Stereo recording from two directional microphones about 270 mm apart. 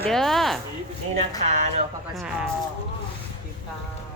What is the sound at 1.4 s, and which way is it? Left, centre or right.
Speech, right.